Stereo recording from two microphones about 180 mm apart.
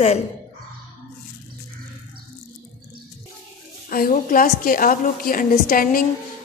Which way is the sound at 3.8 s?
50° left (ahead or behind).